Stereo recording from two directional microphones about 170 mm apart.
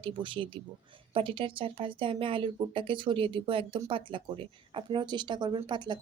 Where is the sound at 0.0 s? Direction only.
30° right (ahead or behind).